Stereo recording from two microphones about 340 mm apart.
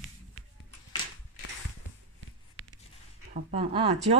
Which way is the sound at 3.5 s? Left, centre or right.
Centre.